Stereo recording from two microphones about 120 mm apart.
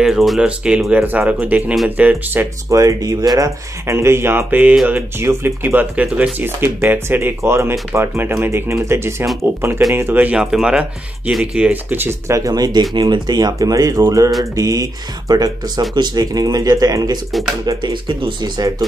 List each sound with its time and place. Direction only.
0.0 s speech: centre (ahead or behind)
2.7 s speech: 30° right (ahead or behind)